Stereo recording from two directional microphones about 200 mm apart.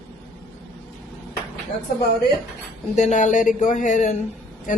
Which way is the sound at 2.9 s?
35° left (ahead or behind).